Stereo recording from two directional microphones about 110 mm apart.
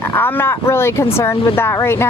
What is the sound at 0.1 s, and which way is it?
Speech, 20° left (ahead or behind).